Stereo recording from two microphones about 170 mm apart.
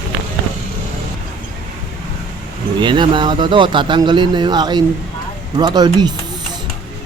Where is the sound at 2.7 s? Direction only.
25° right (ahead or behind).